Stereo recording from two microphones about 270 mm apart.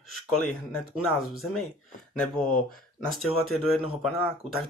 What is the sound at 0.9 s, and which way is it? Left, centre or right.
Speech, centre.